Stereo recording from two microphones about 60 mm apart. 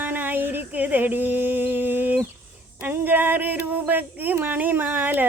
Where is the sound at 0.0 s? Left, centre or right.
Right.